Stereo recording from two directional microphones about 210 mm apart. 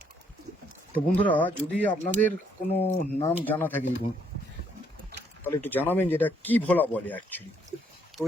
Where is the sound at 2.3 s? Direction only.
35° left (ahead or behind).